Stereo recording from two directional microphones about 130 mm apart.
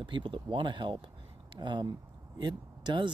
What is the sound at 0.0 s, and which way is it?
Speech, 40° right (ahead or behind).